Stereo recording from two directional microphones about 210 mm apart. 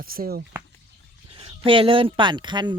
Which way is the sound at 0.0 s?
45° right (ahead or behind).